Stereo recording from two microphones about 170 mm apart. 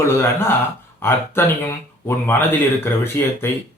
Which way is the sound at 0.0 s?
15° left (ahead or behind).